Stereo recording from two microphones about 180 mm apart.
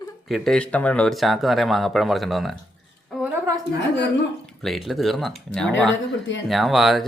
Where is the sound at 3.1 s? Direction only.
5° right (ahead or behind).